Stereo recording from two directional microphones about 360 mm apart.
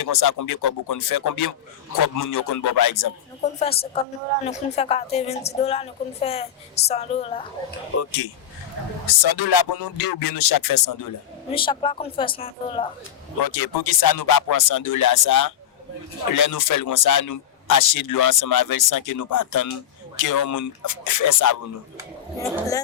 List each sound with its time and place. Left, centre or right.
0.0 s a man's voice: left
3.4 s speech: centre
9.0 s speech: left
11.5 s speech: centre
13.4 s a man's voice: left
22.4 s speech: centre